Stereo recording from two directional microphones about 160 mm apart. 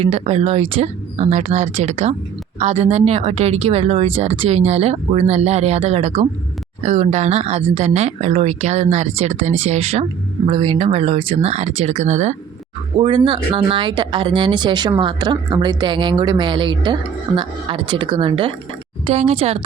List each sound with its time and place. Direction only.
0.0 s speech: 40° right (ahead or behind)
13.0 s speech: 30° right (ahead or behind)